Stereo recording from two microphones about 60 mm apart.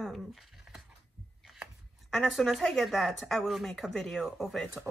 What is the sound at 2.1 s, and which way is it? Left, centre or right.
Speech, centre.